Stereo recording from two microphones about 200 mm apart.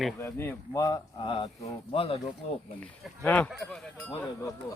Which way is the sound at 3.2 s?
5° left (ahead or behind).